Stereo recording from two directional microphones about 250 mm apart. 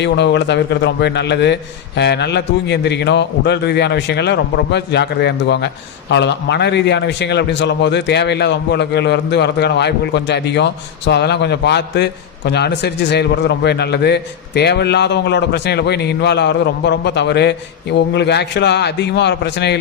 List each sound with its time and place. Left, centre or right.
0.0 s a man's voice: left